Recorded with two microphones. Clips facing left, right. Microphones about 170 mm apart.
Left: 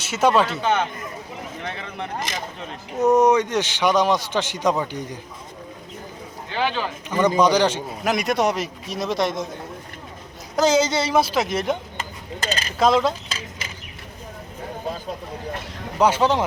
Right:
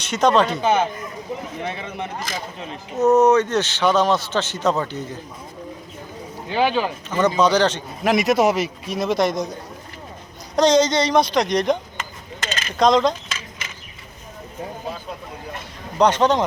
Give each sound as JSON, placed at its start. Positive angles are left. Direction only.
{"t": 0.0, "sound": "speech", "side_deg": 5}
{"t": 0.6, "sound": "speech", "side_deg": -10}
{"t": 3.0, "sound": "a man's voice", "side_deg": 15}
{"t": 6.5, "sound": "speech", "side_deg": -15}
{"t": 7.1, "sound": "a man's voice", "side_deg": 10}
{"t": 8.0, "sound": "a man's voice", "side_deg": 0}
{"t": 10.6, "sound": "a man's voice", "side_deg": 5}
{"t": 12.5, "sound": "mechanisms", "side_deg": 35}
{"t": 12.8, "sound": "a man's voice", "side_deg": 5}
{"t": 16.0, "sound": "a man's voice", "side_deg": 5}